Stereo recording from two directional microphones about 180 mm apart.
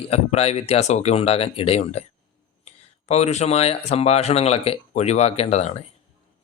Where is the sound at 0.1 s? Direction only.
35° left (ahead or behind).